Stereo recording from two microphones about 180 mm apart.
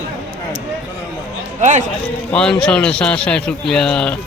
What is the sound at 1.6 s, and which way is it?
Speech, 45° right (ahead or behind).